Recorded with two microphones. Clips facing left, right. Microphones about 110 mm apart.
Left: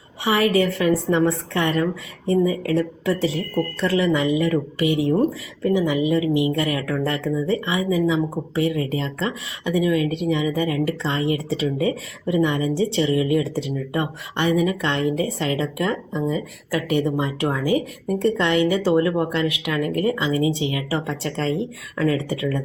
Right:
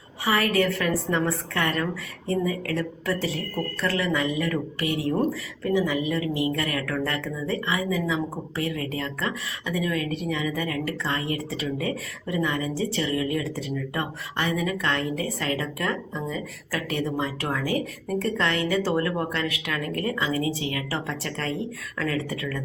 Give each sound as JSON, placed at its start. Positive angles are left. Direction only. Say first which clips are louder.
{"t": 0.4, "sound": "speech", "louder": "left 5 dB", "side_deg": 15}